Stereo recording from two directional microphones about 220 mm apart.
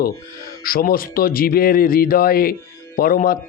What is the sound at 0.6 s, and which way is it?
Speech, 40° left (ahead or behind).